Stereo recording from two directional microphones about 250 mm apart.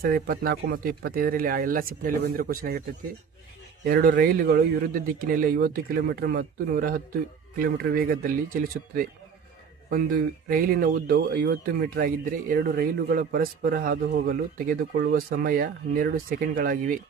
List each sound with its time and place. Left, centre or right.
0.0 s speech: right
3.8 s speech: right